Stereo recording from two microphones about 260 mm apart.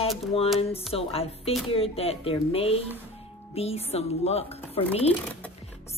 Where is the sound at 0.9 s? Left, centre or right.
Left.